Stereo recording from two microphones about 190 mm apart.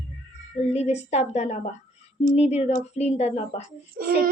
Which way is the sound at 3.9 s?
50° right (ahead or behind).